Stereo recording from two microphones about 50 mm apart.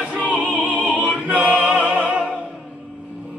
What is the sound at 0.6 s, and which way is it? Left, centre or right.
Opera, right.